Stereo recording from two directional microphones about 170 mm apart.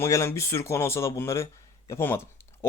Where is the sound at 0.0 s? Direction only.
15° left (ahead or behind).